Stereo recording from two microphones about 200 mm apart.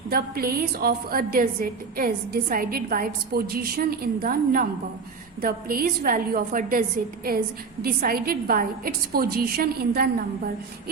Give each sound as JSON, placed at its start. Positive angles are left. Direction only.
{"t": 0.1, "sound": "a woman's voice", "side_deg": -45}